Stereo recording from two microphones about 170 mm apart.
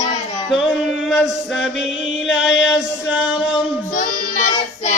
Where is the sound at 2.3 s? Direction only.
90° left.